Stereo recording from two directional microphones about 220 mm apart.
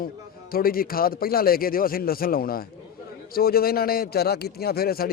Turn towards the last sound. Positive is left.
turn(degrees=45)  # may be behind; listen again after turning